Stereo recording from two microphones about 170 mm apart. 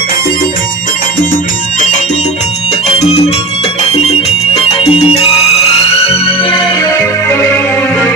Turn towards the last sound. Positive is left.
turn(degrees=15)  # may be behind; listen again after turning